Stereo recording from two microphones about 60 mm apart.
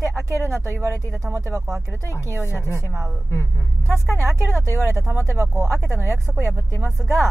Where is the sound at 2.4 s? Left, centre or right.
Left.